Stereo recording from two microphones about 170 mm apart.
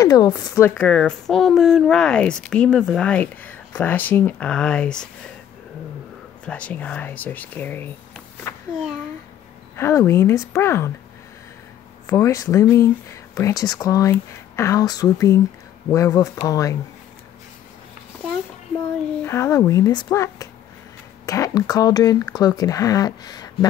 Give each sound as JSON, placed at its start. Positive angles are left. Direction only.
{"t": 0.0, "sound": "speech", "side_deg": 20}
{"t": 0.7, "sound": "speech", "side_deg": 5}
{"t": 6.4, "sound": "speech", "side_deg": 5}
{"t": 9.8, "sound": "speech", "side_deg": 15}
{"t": 12.1, "sound": "speech", "side_deg": 20}
{"t": 19.2, "sound": "speech", "side_deg": 15}